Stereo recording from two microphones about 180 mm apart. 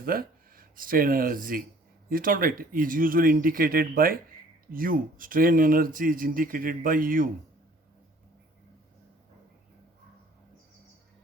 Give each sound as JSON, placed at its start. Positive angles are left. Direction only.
{"t": 0.0, "sound": "speech", "side_deg": -55}